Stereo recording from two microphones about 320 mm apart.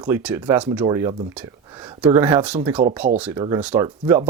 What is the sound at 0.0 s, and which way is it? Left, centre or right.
Speech, centre.